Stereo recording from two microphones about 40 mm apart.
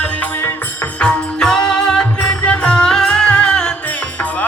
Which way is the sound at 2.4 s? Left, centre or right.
Left.